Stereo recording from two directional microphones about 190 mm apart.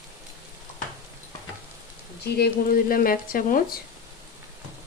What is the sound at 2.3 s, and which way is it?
Speech, 55° left (ahead or behind).